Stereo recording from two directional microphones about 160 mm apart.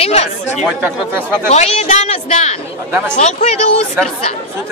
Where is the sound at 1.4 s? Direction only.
40° left (ahead or behind).